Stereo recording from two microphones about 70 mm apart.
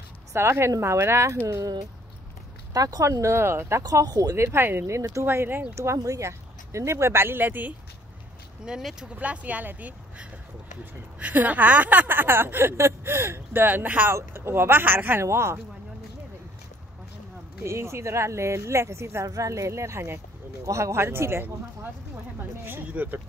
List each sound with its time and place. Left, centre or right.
0.3 s speech: right
2.7 s speech: right
3.1 s speech: right
3.8 s speech: right
4.4 s speech: right
5.2 s speech: right
5.9 s speech: right
8.6 s speech: centre
9.1 s speech: right
17.6 s speech: right
19.2 s speech: right
22.7 s speech: right